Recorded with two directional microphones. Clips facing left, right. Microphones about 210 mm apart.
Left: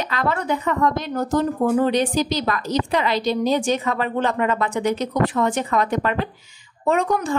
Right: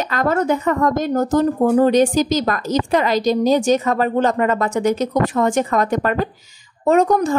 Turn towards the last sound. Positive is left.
turn(degrees=-40)  # may be behind; listen again after turning